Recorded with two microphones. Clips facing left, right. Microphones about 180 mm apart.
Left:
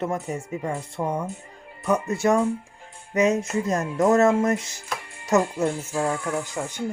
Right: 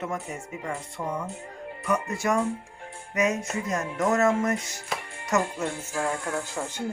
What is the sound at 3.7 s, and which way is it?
Speech, 30° left (ahead or behind).